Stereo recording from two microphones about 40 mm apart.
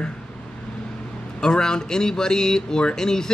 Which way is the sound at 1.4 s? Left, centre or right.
Centre.